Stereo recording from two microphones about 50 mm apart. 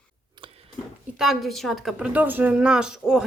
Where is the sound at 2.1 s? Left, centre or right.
Right.